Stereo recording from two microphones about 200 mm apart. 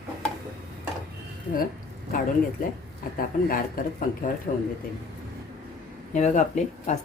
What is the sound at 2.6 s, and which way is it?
A woman's voice, 45° left (ahead or behind).